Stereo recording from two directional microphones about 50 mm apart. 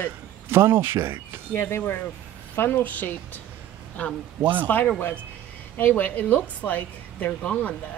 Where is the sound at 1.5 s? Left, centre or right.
Left.